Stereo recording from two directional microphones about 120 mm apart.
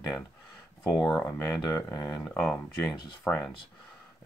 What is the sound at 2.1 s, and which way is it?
Speech, 5° left (ahead or behind).